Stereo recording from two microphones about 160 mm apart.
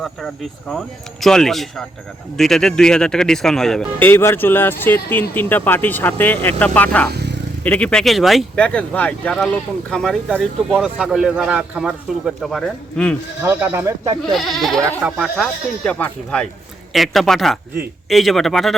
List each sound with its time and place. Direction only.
0.7 s speech: centre (ahead or behind)
4.1 s speech: 15° left (ahead or behind)
7.1 s vehicle: 90° right
7.6 s speech: 10° left (ahead or behind)
13.4 s speech: 15° right (ahead or behind)
14.3 s speech: centre (ahead or behind)